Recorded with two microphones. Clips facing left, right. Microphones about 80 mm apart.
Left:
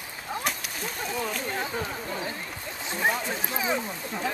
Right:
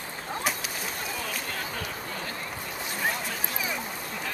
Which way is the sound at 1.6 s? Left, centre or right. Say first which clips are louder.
Left 3 dB; left.